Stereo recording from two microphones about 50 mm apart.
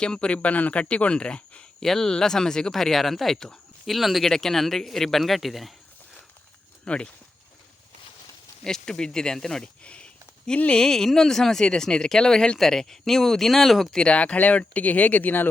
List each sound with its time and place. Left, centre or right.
0.0 s speech: centre
1.8 s speech: centre
3.8 s speech: centre
6.8 s speech: left
8.6 s speech: centre
9.8 s a sound: left
10.8 s speech: centre
14.0 s speech: left